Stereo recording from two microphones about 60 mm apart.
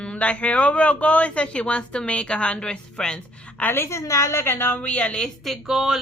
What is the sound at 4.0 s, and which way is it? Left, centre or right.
Speech, left.